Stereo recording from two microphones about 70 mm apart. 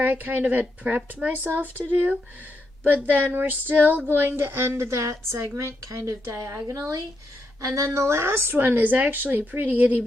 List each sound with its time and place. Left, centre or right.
0.0 s speech: right
2.8 s a sound: right
6.7 s speech: right